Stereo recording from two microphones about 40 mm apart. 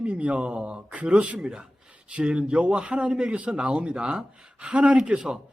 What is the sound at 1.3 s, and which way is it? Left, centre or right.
A man's voice, centre.